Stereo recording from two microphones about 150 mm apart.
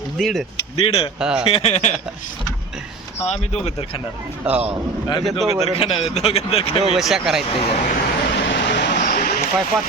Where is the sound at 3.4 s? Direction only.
45° left (ahead or behind).